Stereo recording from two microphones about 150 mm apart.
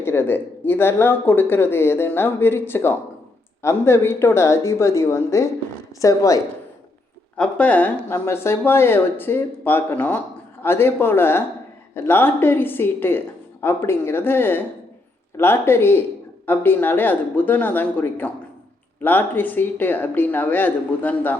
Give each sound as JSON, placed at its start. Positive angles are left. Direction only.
{"t": 0.0, "sound": "speech", "side_deg": 15}
{"t": 7.3, "sound": "speech", "side_deg": 10}